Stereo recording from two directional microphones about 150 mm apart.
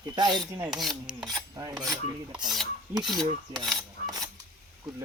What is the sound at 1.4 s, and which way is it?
Filing, 25° right (ahead or behind).